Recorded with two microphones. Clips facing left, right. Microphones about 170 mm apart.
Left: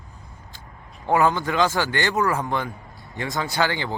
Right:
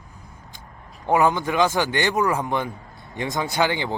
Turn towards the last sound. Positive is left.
turn(degrees=-20)  # may be behind; listen again after turning